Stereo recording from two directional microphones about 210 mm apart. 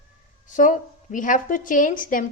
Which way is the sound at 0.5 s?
40° left (ahead or behind).